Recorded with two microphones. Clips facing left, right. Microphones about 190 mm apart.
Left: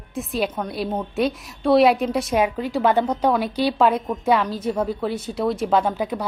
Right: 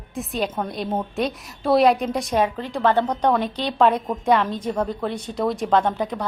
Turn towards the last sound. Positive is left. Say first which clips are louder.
# even
turn(degrees=5)  # may be behind; listen again after turning